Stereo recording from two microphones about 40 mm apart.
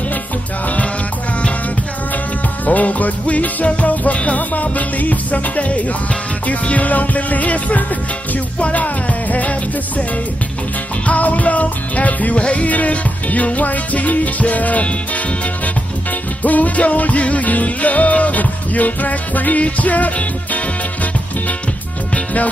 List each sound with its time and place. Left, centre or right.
2.6 s music: left
11.1 s music: left
12.4 s music: left
12.6 s music: left
16.4 s music: left
22.1 s music: left